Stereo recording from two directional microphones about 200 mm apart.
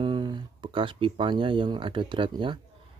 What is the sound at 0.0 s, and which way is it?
Speech, 25° right (ahead or behind).